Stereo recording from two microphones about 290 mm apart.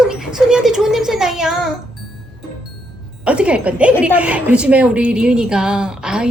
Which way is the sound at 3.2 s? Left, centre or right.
Centre.